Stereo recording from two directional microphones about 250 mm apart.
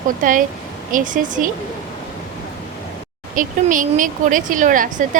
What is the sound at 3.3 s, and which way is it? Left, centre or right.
A woman's voice, right.